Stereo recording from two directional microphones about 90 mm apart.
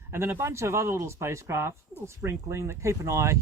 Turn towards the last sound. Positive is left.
turn(degrees=-35)  # may be behind; listen again after turning